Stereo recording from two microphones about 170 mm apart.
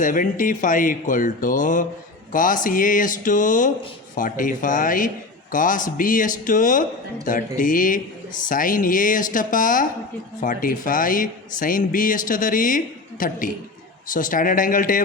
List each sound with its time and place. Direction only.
0.0 s a man's voice: 50° left (ahead or behind)